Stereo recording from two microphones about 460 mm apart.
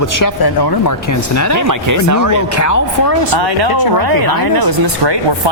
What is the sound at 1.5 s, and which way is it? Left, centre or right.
Speech, right.